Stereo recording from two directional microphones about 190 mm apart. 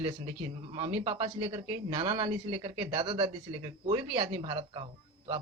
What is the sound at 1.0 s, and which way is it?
Speech, 30° right (ahead or behind).